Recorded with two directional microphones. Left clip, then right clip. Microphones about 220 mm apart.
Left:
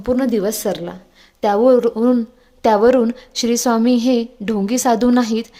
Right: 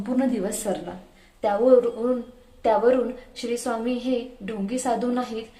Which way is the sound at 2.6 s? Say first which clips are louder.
Left 7 dB; 50° left (ahead or behind).